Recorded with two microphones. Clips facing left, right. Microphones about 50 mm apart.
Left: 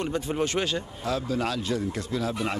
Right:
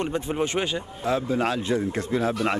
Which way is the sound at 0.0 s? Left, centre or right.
Centre.